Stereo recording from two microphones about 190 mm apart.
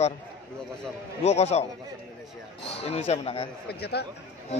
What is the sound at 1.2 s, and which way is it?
Speech, 35° left (ahead or behind).